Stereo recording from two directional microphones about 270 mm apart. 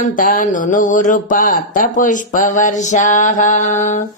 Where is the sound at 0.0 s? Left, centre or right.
Left.